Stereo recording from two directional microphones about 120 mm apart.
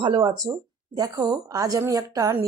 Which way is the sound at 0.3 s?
30° right (ahead or behind).